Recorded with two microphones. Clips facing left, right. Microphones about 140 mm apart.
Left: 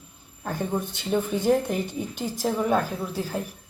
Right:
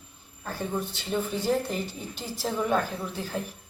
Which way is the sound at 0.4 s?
15° left (ahead or behind).